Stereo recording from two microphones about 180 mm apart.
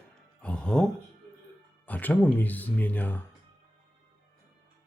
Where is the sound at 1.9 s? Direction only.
10° left (ahead or behind).